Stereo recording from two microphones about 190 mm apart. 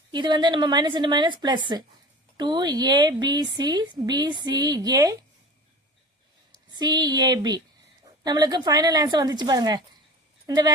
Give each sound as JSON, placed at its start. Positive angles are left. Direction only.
{"t": 0.1, "sound": "a woman's voice", "side_deg": -25}
{"t": 6.7, "sound": "a woman's voice", "side_deg": -20}